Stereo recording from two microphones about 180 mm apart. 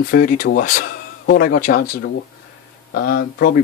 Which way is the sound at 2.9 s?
70° left (ahead or behind).